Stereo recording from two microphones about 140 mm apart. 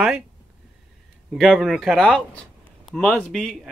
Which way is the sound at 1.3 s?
5° right (ahead or behind).